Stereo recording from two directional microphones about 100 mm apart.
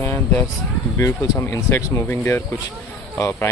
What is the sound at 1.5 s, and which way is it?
Speech, 30° left (ahead or behind).